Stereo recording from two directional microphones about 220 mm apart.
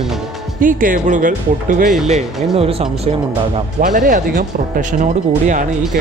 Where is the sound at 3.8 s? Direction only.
35° right (ahead or behind).